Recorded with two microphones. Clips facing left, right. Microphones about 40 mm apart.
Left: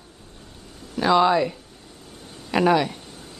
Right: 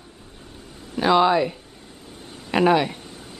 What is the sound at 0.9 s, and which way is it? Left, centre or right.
Speech, centre.